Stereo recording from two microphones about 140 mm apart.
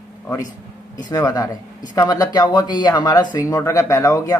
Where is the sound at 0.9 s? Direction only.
30° left (ahead or behind).